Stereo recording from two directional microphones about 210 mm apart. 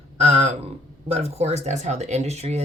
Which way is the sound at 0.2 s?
30° right (ahead or behind).